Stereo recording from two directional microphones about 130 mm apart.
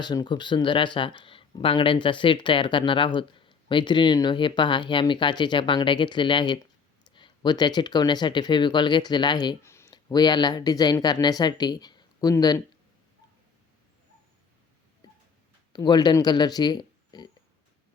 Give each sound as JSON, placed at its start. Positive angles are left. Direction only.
{"t": 0.0, "sound": "speech", "side_deg": 35}
{"t": 9.6, "sound": "a sound", "side_deg": 20}
{"t": 9.9, "sound": "speech", "side_deg": 30}
{"t": 15.7, "sound": "speech", "side_deg": 30}